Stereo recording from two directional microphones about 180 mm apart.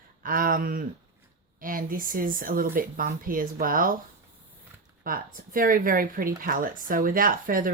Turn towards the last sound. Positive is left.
turn(degrees=-50)  # may be behind; listen again after turning